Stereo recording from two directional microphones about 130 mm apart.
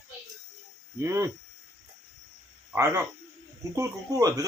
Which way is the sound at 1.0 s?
20° right (ahead or behind).